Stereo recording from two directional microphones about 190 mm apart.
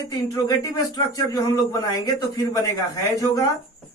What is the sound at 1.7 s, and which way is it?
Speech, 20° left (ahead or behind).